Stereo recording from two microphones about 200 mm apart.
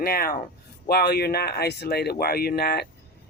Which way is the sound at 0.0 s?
50° left (ahead or behind).